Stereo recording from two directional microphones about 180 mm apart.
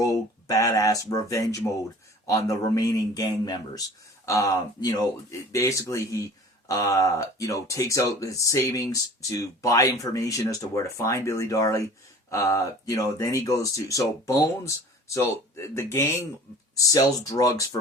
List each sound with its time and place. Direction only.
0.0 s speech: 20° left (ahead or behind)